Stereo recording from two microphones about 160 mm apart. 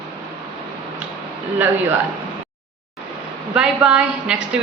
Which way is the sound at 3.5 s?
5° right (ahead or behind).